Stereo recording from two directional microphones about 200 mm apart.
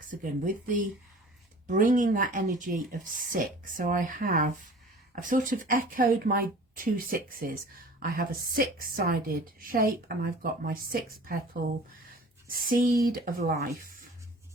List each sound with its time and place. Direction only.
0.1 s speech: 40° right (ahead or behind)
12.5 s speech: 45° right (ahead or behind)